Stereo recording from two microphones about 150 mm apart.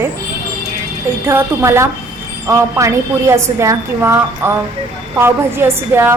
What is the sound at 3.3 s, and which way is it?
A woman's voice, 20° right (ahead or behind).